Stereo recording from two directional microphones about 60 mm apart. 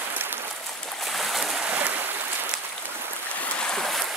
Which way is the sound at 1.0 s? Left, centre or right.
Centre.